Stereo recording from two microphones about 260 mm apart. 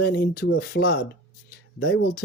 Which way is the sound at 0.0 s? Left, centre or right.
Left.